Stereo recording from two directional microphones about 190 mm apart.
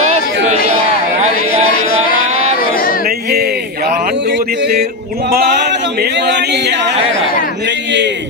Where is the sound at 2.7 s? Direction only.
50° left (ahead or behind).